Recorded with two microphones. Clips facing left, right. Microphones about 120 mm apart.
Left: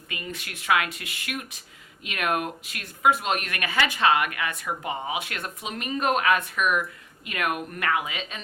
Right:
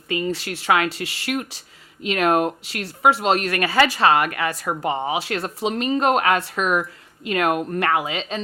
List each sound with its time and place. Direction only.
0.1 s a woman's voice: 30° right (ahead or behind)